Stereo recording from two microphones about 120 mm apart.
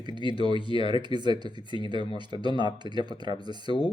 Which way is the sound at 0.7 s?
40° right (ahead or behind).